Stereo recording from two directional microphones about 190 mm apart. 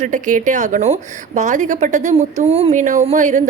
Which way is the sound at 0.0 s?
40° right (ahead or behind).